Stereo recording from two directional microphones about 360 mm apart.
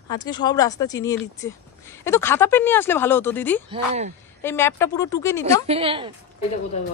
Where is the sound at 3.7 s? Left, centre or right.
Centre.